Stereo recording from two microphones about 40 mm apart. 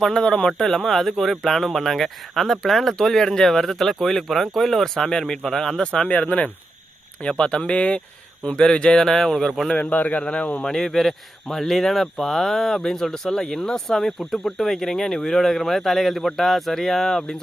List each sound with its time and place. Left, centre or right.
0.0 s speech: centre
0.6 s speech: centre
5.8 s speech: left
6.1 s speech: left
7.2 s speech: left
9.0 s speech: centre
9.7 s a man's voice: left
10.2 s speech: left
10.6 s speech: centre